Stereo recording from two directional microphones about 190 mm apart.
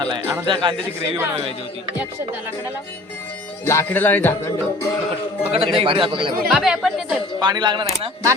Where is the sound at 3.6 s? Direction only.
15° left (ahead or behind).